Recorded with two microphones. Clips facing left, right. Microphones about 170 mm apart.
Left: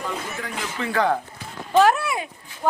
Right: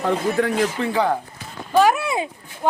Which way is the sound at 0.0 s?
65° right (ahead or behind).